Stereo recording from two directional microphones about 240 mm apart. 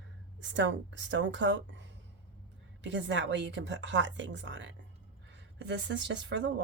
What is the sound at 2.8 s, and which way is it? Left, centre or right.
Speech, right.